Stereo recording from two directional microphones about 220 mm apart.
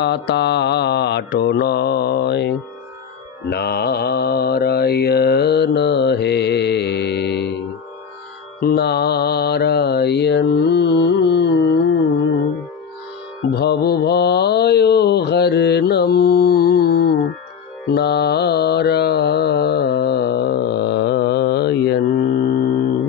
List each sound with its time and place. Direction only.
0.0 s mantra: 50° left (ahead or behind)
8.5 s mantra: 45° left (ahead or behind)
13.5 s mantra: 45° left (ahead or behind)